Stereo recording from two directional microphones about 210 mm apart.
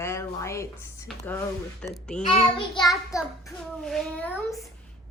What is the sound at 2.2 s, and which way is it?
Speech, 30° left (ahead or behind).